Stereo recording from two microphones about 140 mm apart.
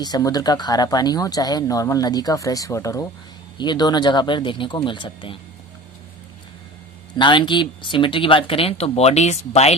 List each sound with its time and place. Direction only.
0.0 s speech: 30° left (ahead or behind)
7.2 s speech: 35° left (ahead or behind)